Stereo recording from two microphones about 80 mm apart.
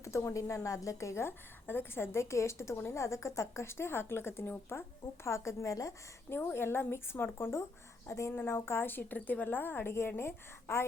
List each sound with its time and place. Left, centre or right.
0.0 s a woman's voice: left
6.3 s a woman's voice: left
8.3 s a woman's voice: left